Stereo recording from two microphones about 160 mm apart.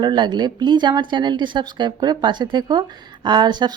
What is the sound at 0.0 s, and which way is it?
Speech, 25° right (ahead or behind).